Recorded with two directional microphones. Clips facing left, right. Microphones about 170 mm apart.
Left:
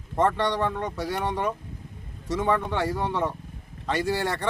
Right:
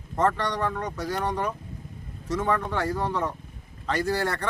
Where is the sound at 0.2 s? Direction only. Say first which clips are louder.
Left 2 dB; 20° left (ahead or behind).